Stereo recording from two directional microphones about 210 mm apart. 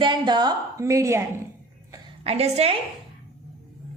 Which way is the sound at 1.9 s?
30° right (ahead or behind).